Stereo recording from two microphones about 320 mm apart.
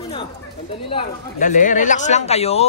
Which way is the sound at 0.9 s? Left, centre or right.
Centre.